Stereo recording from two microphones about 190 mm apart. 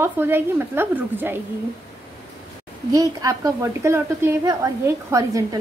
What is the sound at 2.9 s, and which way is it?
A woman's voice, 20° right (ahead or behind).